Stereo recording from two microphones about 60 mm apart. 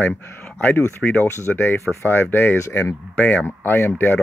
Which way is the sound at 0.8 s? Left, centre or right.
Left.